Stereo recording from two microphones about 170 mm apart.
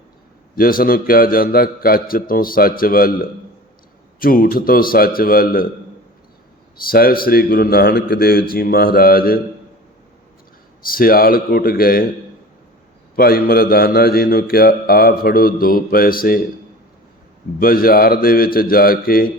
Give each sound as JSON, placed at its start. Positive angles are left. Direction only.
{"t": 0.5, "sound": "mantra", "side_deg": 60}
{"t": 6.8, "sound": "mantra", "side_deg": 60}
{"t": 10.8, "sound": "mantra", "side_deg": 60}
{"t": 13.1, "sound": "mantra", "side_deg": 60}
{"t": 17.6, "sound": "mantra", "side_deg": 60}